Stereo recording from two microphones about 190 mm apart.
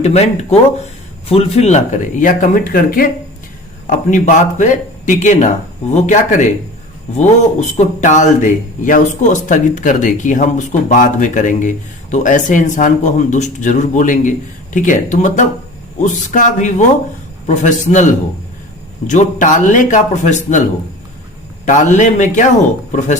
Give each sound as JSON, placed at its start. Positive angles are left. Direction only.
{"t": 0.0, "sound": "speech", "side_deg": 35}
{"t": 7.8, "sound": "speech", "side_deg": 40}
{"t": 21.7, "sound": "speech", "side_deg": 40}